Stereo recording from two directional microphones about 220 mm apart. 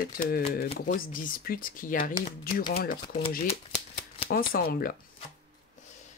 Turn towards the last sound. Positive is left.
turn(degrees=40)  # may be behind; listen again after turning